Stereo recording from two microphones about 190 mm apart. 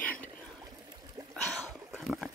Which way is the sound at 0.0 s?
10° left (ahead or behind).